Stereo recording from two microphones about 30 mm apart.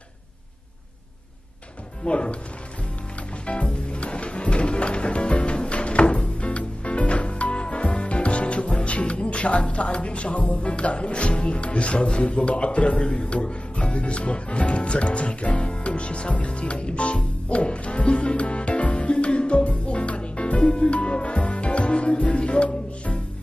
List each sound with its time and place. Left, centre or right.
2.0 s speech: left
3.4 s music: left
12.2 s speech: left